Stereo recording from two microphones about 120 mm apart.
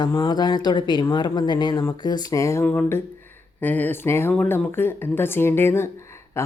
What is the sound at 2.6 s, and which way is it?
A woman's voice, 15° left (ahead or behind).